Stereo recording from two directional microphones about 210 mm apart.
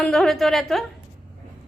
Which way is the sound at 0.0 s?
Centre (ahead or behind).